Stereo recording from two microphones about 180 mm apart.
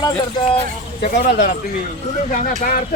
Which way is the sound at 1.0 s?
50° left (ahead or behind).